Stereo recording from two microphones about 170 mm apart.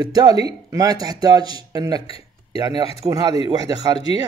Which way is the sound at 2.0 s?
35° left (ahead or behind).